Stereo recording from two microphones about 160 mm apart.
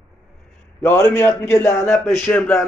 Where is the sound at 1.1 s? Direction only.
15° left (ahead or behind).